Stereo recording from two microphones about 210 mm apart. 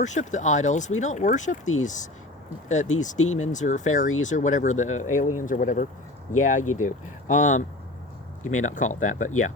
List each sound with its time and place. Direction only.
0.0 s speech: 35° left (ahead or behind)
6.6 s speech: 90° left
6.8 s speech: 35° left (ahead or behind)